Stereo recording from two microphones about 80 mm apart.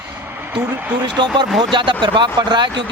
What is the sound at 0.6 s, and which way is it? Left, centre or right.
Speech, right.